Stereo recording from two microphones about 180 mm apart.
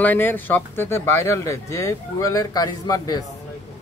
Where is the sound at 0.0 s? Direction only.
10° left (ahead or behind).